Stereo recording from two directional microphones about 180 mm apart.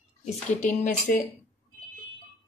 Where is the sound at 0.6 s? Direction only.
45° left (ahead or behind).